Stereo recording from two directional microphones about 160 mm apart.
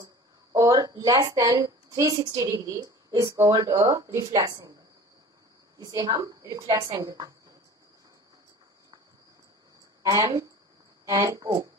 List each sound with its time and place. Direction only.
0.0 s a woman's voice: 25° right (ahead or behind)
5.8 s a woman's voice: 25° right (ahead or behind)
10.0 s a woman's voice: 20° right (ahead or behind)